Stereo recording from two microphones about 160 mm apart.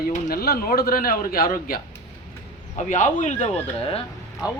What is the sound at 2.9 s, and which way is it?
Speech, 50° left (ahead or behind).